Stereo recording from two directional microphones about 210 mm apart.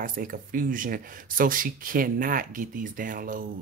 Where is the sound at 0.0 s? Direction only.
40° right (ahead or behind).